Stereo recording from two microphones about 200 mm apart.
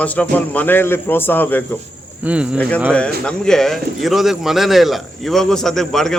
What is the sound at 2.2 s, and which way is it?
Speech, 5° right (ahead or behind).